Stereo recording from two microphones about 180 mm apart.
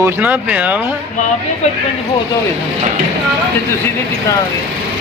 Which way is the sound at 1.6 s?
35° left (ahead or behind).